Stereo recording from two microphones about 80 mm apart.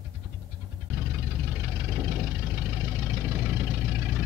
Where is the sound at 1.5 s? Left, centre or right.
Right.